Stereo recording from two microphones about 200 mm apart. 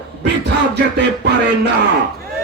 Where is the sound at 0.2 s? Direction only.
60° right (ahead or behind).